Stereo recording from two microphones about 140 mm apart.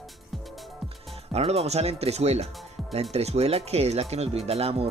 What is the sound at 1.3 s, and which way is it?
Speech, 50° right (ahead or behind).